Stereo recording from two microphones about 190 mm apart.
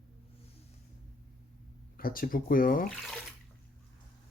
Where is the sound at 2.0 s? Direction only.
50° left (ahead or behind).